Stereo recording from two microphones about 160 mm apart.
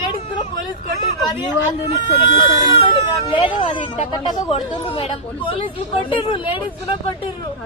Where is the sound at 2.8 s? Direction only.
30° left (ahead or behind).